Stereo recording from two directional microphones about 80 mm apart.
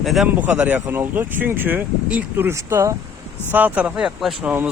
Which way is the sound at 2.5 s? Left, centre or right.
Right.